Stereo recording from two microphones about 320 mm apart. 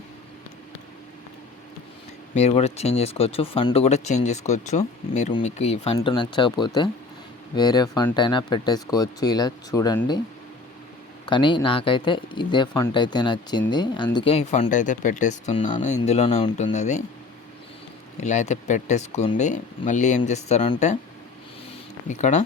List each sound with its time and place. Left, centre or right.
2.3 s speech: centre
11.3 s speech: centre
18.2 s speech: left
22.0 s speech: left